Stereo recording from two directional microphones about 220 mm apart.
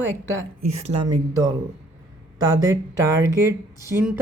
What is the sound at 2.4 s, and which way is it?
Speech, 15° right (ahead or behind).